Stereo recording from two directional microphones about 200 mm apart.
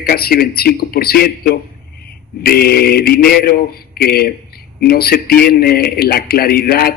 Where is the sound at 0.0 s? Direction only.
50° left (ahead or behind).